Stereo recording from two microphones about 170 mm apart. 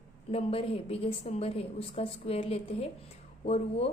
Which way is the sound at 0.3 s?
35° left (ahead or behind).